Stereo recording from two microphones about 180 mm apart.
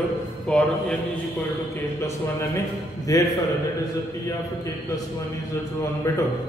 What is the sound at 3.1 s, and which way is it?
Speech, 20° left (ahead or behind).